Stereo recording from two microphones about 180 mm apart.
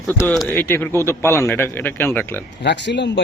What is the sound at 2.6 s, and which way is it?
Speech, 75° left (ahead or behind).